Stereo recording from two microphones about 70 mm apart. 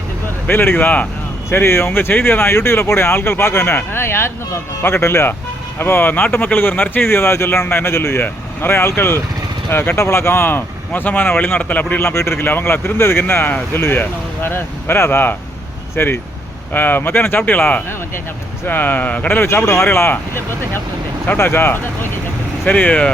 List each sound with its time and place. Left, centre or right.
0.4 s speech: left
1.5 s speech: left
12.0 s speech: left
19.4 s speech: left